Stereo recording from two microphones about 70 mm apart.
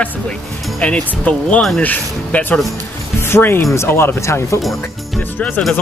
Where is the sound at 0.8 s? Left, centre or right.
Centre.